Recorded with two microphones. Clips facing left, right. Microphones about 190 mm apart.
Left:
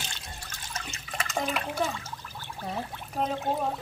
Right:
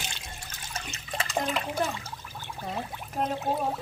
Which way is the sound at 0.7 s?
35° right (ahead or behind).